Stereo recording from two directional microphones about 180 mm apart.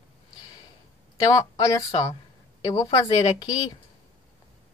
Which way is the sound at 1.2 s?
20° left (ahead or behind).